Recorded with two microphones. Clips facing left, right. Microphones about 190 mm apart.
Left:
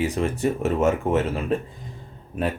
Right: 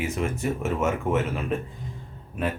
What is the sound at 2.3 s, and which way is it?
Speech, 35° left (ahead or behind).